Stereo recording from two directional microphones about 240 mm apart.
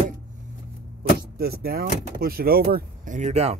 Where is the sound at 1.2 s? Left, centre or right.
Right.